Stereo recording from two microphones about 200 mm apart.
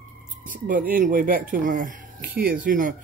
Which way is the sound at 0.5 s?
40° right (ahead or behind).